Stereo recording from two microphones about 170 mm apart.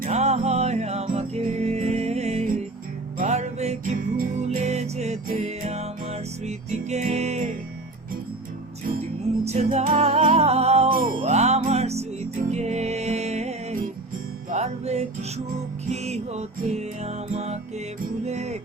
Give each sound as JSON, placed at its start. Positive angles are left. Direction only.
{"t": 0.0, "sound": "music", "side_deg": -40}
{"t": 9.4, "sound": "music", "side_deg": -40}
{"t": 10.9, "sound": "music", "side_deg": -55}
{"t": 11.2, "sound": "music", "side_deg": -40}